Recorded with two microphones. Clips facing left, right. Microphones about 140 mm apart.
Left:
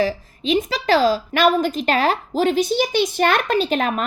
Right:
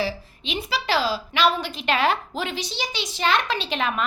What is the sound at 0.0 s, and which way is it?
A woman's voice, 40° left (ahead or behind).